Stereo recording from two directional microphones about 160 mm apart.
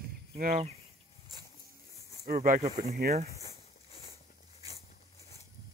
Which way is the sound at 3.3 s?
35° left (ahead or behind).